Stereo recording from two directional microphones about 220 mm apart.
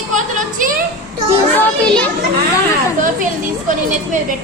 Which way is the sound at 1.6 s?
5° left (ahead or behind).